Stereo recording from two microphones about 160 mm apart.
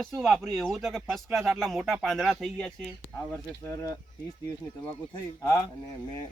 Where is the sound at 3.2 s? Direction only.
15° left (ahead or behind).